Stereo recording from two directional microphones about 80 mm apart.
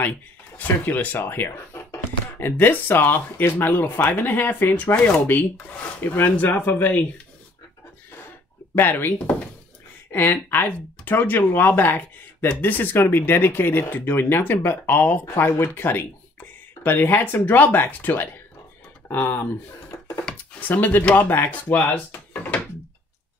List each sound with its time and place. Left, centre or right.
0.6 s speech: left
8.7 s speech: left
10.1 s speech: left
20.2 s a sound: centre
21.1 s speech: left